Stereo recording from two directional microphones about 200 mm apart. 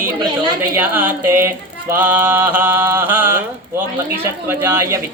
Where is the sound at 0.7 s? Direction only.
10° right (ahead or behind).